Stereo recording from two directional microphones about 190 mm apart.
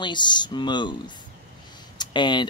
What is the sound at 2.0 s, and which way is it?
Speech, 25° left (ahead or behind).